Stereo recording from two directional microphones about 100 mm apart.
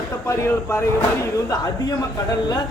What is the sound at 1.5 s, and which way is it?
Speech, 40° left (ahead or behind).